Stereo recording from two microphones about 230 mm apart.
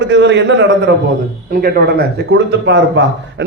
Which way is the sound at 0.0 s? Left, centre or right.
Right.